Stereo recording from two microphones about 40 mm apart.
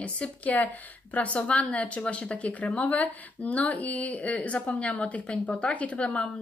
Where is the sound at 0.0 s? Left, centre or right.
Left.